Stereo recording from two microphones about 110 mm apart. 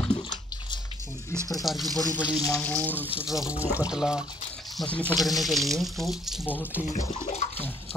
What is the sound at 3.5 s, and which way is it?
Speech, 15° right (ahead or behind).